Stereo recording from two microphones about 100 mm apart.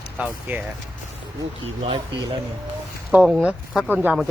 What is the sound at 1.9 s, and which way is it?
Speech, 55° right (ahead or behind).